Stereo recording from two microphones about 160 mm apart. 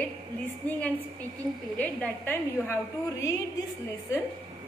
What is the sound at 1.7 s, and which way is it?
A woman's voice, 10° left (ahead or behind).